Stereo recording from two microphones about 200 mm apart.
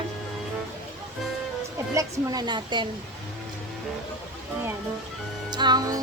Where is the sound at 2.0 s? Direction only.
20° right (ahead or behind).